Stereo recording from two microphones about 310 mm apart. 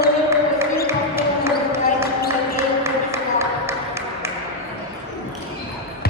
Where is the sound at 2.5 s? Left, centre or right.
Centre.